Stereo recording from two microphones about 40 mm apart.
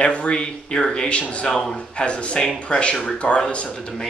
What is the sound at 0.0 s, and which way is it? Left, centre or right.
Speech, left.